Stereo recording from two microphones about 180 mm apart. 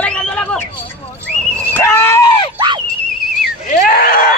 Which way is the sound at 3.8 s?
55° left (ahead or behind).